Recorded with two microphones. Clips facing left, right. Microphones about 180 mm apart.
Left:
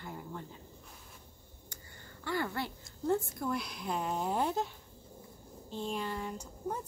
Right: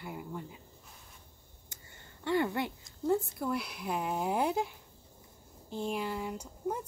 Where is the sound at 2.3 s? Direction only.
20° right (ahead or behind).